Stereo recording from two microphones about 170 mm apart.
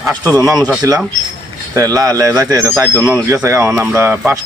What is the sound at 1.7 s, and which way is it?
Speech, 20° right (ahead or behind).